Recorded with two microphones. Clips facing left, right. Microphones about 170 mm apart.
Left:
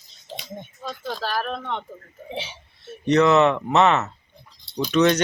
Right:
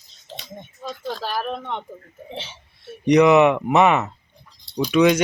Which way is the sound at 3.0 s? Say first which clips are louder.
Right 3 dB; 15° right (ahead or behind).